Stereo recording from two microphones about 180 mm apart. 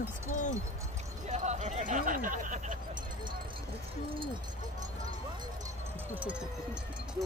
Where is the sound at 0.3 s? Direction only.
45° left (ahead or behind).